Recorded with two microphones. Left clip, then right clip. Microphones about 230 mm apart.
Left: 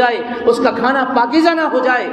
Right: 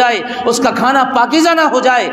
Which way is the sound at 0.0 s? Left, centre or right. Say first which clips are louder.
Right 1 dB; right.